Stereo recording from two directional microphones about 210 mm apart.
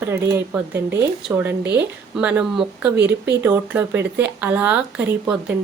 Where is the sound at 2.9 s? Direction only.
55° right (ahead or behind).